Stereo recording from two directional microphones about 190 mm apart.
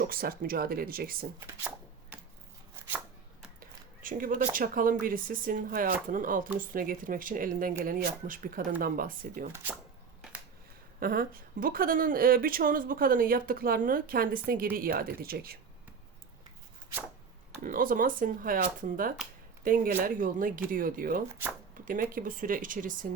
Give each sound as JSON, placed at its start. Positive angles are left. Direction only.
{"t": 0.1, "sound": "speech", "side_deg": -50}
{"t": 1.4, "sound": "a sound", "side_deg": -10}
{"t": 2.7, "sound": "chopping", "side_deg": -10}
{"t": 3.6, "sound": "speech", "side_deg": -45}
{"t": 11.0, "sound": "speech", "side_deg": -50}
{"t": 17.6, "sound": "speech", "side_deg": -45}